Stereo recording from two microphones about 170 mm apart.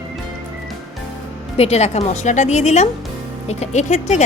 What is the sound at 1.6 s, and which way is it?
A woman's voice, 40° left (ahead or behind).